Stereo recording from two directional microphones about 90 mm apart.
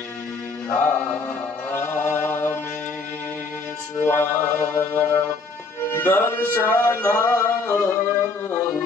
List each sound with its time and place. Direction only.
0.7 s mantra: 20° left (ahead or behind)
1.7 s chant: 25° left (ahead or behind)
4.0 s music: 25° left (ahead or behind)
8.5 s mantra: 25° left (ahead or behind)